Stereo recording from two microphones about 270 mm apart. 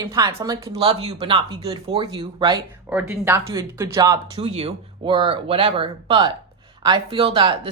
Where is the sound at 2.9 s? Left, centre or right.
Centre.